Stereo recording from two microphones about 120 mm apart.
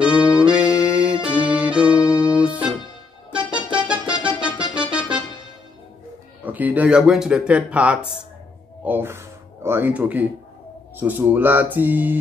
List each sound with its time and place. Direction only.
0.0 s music: 10° right (ahead or behind)
6.4 s speech: 15° right (ahead or behind)